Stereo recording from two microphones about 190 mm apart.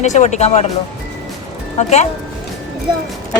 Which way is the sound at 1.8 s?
35° left (ahead or behind).